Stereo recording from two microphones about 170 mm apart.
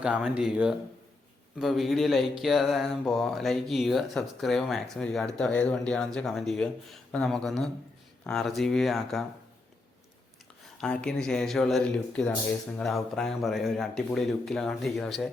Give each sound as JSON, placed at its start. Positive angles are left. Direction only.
{"t": 0.0, "sound": "speech", "side_deg": -5}
{"t": 10.8, "sound": "speech", "side_deg": 5}